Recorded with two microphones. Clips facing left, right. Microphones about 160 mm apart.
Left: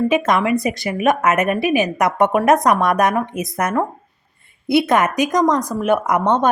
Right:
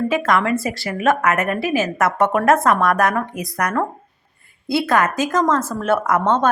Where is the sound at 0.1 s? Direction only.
20° left (ahead or behind).